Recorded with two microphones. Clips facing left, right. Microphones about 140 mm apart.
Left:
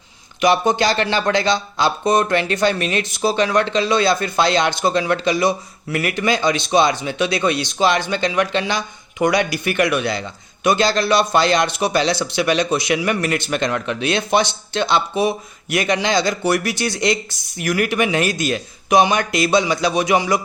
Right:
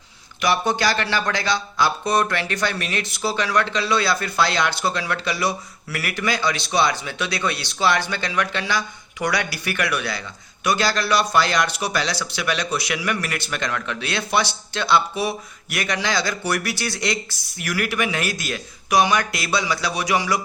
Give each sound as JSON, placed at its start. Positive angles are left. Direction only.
{"t": 0.4, "sound": "speech", "side_deg": 20}